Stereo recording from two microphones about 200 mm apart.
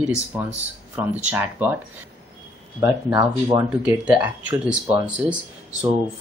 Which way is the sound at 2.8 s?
15° right (ahead or behind).